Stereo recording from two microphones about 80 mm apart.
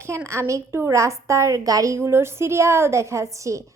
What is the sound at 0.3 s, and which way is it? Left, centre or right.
A woman's voice, right.